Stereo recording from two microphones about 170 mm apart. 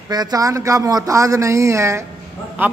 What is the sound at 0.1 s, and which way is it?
A man's voice, 20° right (ahead or behind).